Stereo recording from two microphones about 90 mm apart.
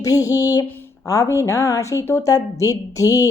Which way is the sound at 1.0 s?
40° left (ahead or behind).